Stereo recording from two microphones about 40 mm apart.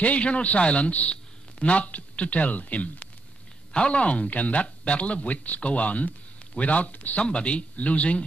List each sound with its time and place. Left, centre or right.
0.0 s speech: left
3.7 s speech: left
7.2 s speech: left